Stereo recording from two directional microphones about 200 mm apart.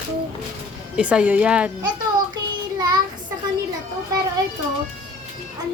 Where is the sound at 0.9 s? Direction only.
5° right (ahead or behind).